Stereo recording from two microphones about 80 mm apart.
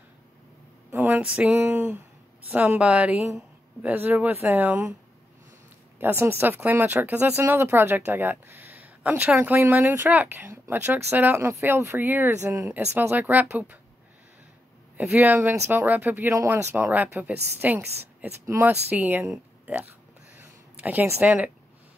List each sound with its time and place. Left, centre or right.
0.9 s a sound: right
1.2 s speech: centre
5.9 s speech: right
7.3 s speech: right
12.4 s a woman's voice: right
12.7 s speech: right
15.0 s speech: centre
17.7 s a woman's voice: right
18.6 s speech: right
20.3 s a sound: right
21.2 s speech: centre